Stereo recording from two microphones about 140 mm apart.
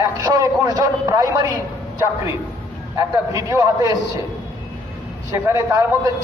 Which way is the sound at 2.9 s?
25° right (ahead or behind).